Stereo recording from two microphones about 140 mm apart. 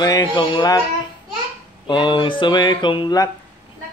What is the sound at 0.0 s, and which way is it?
Speech, 30° left (ahead or behind).